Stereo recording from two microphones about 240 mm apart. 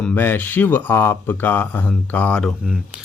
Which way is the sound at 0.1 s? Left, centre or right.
Centre.